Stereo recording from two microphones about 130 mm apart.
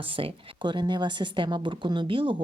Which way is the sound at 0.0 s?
45° right (ahead or behind).